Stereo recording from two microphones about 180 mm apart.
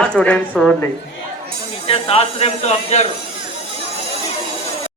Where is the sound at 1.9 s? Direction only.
30° left (ahead or behind).